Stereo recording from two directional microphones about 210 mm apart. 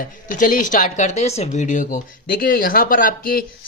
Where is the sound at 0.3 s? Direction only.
40° left (ahead or behind).